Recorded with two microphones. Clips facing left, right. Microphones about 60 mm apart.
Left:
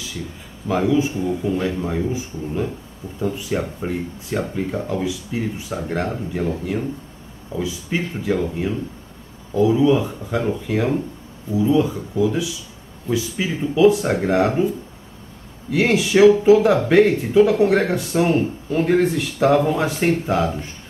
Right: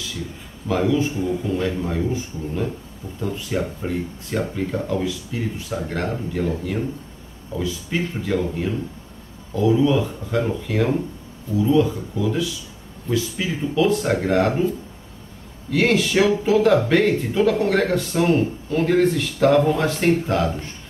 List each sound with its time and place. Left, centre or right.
0.7 s speech: centre
15.7 s speech: centre